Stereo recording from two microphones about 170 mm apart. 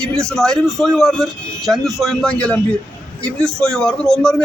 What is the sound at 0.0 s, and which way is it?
Speech, 5° left (ahead or behind).